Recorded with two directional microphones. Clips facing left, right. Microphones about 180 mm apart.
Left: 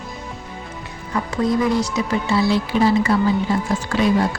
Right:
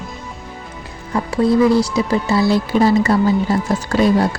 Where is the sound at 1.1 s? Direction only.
30° right (ahead or behind).